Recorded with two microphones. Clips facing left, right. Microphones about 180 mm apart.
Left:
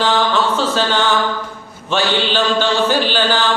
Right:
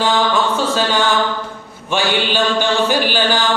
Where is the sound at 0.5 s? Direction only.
10° right (ahead or behind).